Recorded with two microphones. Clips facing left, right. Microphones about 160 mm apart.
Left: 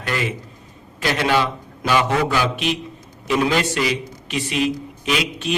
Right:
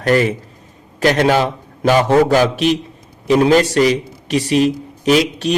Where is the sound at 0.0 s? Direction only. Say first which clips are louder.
Right 10 dB; 45° right (ahead or behind).